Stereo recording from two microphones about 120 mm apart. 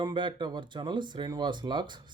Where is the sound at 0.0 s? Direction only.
40° right (ahead or behind).